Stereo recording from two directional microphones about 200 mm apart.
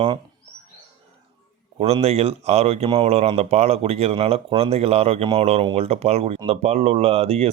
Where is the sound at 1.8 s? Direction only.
30° right (ahead or behind).